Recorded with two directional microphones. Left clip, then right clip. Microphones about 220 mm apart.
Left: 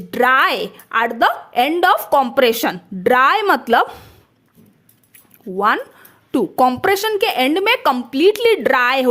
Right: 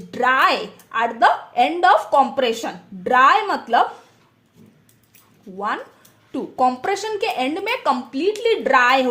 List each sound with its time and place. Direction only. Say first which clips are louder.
0.1 s a woman's voice: left 3 dB; 35° left (ahead or behind)
5.5 s a woman's voice: left 8 dB; 45° left (ahead or behind)